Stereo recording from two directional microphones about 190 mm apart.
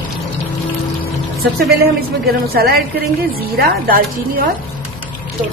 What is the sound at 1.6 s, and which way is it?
A woman's voice, 55° right (ahead or behind).